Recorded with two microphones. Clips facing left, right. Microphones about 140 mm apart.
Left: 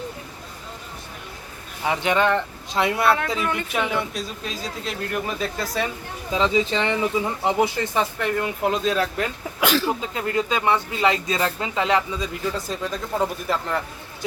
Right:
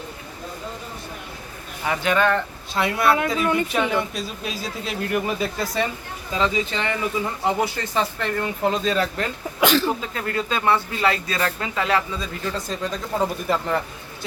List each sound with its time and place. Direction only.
1.8 s speech: 20° left (ahead or behind)
3.2 s speech: 15° right (ahead or behind)
3.7 s speech: 5° left (ahead or behind)
6.3 s speech: 25° left (ahead or behind); by 9.9 s 5° left (ahead or behind)
10.0 s speech: 15° left (ahead or behind); by 13.8 s centre (ahead or behind)